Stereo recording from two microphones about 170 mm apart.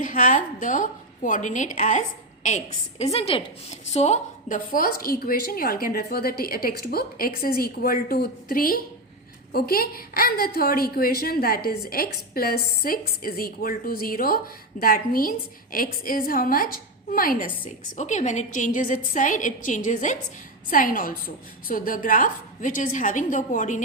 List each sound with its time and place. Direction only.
0.0 s a woman's voice: 50° left (ahead or behind)
17.9 s a woman's voice: 45° left (ahead or behind)